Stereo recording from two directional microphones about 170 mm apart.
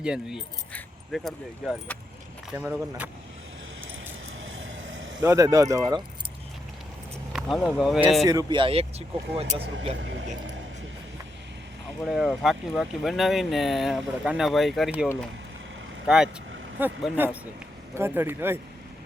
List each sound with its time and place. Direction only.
0.0 s speech: 5° right (ahead or behind)
2.5 s speech: 10° right (ahead or behind)
4.6 s vehicle: 90° right
5.2 s speech: 15° right (ahead or behind)
7.3 s speech: centre (ahead or behind)
8.3 s speech: 25° right (ahead or behind)
12.0 s speech: centre (ahead or behind)